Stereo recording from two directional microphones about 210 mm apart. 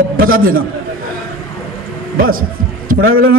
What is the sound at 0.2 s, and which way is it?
Speech, 45° right (ahead or behind).